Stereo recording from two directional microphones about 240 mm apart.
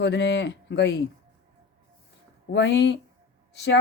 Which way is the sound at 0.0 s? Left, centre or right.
Left.